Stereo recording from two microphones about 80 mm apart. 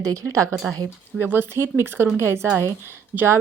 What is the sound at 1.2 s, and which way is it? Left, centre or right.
A woman's voice, right.